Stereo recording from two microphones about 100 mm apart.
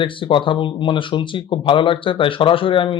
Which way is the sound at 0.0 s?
60° left (ahead or behind).